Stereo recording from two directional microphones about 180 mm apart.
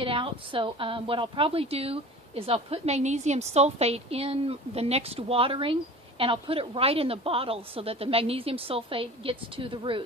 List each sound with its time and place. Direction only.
0.0 s a woman's voice: 30° right (ahead or behind)